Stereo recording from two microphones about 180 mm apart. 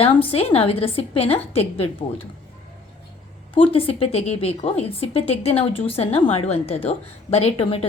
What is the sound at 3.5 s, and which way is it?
A woman's voice, 30° left (ahead or behind).